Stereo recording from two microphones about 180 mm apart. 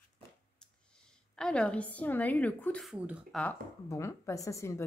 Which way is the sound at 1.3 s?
5° left (ahead or behind).